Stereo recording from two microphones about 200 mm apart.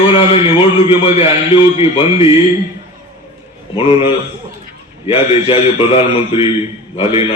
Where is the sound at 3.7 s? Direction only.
25° left (ahead or behind).